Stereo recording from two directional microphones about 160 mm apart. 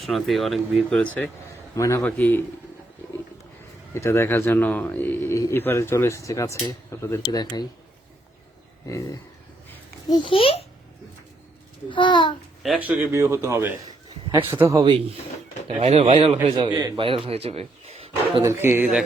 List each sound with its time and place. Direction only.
0.0 s speech: centre (ahead or behind)
1.7 s speech: 20° left (ahead or behind)
3.9 s speech: 15° left (ahead or behind)
10.1 s a child's voice: 35° left (ahead or behind)
11.9 s a child's voice: 30° left (ahead or behind)
12.6 s a man's voice: 5° right (ahead or behind); by 15.0 s 25° right (ahead or behind)
15.7 s a man's voice: 35° right (ahead or behind)
16.7 s a man's voice: 25° right (ahead or behind); by 18.1 s 40° right (ahead or behind)
18.4 s a man's voice: 15° right (ahead or behind)